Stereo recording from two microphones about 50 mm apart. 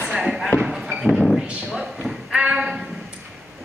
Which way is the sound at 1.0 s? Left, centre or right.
Centre.